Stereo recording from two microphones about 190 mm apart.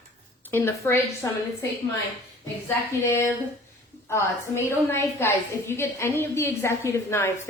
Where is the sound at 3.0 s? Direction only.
15° left (ahead or behind).